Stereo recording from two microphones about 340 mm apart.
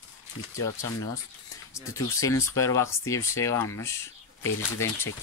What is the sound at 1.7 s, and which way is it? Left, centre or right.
Speech, centre.